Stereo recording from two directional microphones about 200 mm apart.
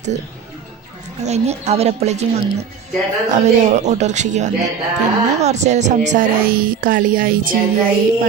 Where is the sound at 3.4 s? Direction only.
35° right (ahead or behind).